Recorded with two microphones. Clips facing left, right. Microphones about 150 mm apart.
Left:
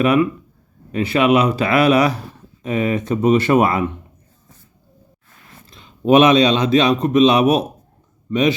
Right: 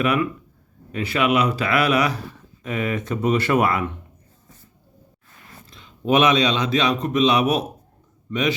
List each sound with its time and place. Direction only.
0.0 s speech: 30° left (ahead or behind)
5.7 s a man's voice: 30° left (ahead or behind)